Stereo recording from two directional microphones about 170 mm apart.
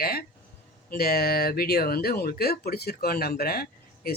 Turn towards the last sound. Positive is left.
turn(degrees=65)  # may be behind; listen again after turning